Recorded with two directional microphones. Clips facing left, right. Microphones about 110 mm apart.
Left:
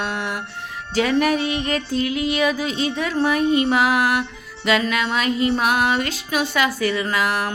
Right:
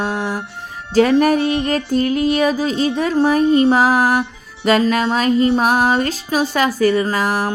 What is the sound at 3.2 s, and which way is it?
A woman's voice, 40° right (ahead or behind).